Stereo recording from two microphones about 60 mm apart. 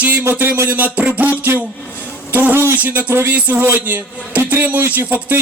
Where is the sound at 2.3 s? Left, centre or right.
Right.